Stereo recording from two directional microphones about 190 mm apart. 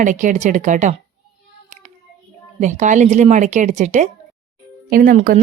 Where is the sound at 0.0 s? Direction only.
40° right (ahead or behind).